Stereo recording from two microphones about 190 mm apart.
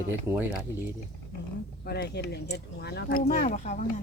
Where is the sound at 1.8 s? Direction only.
55° left (ahead or behind).